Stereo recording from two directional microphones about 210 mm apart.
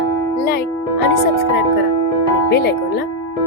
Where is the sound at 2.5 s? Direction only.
50° left (ahead or behind).